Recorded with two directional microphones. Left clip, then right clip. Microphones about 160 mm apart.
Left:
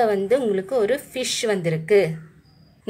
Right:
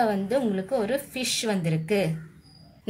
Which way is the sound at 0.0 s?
30° left (ahead or behind).